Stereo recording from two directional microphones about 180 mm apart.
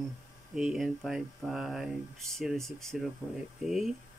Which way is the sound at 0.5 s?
Centre (ahead or behind).